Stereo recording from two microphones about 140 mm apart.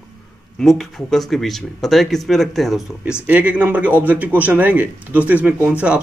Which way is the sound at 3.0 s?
10° right (ahead or behind).